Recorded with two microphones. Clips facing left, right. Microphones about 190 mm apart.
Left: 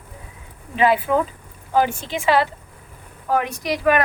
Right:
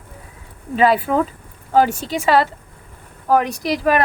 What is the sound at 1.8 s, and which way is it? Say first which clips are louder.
A woman's voice: right 3 dB; 40° right (ahead or behind).